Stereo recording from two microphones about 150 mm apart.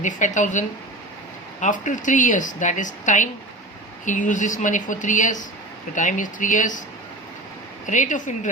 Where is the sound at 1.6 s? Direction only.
55° left (ahead or behind).